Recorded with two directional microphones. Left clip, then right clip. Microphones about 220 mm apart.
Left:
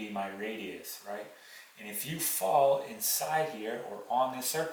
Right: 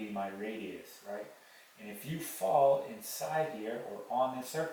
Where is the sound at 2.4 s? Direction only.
10° right (ahead or behind).